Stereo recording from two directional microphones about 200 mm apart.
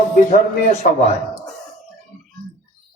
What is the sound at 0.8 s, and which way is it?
Speech, 40° left (ahead or behind).